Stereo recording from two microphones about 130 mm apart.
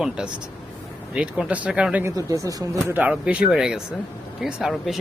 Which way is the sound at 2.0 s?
25° right (ahead or behind).